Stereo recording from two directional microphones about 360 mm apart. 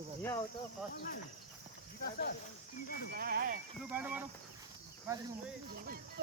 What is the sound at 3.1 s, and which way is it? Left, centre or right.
Speech, right.